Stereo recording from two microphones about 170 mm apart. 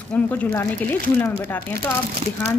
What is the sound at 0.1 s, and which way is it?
Speech, 10° left (ahead or behind).